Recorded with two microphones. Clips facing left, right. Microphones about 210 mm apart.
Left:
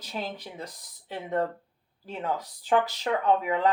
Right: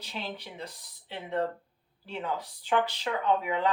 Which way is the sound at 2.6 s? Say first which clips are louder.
Left 3 dB; 45° left (ahead or behind).